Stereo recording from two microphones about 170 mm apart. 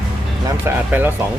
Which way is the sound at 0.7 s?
15° right (ahead or behind).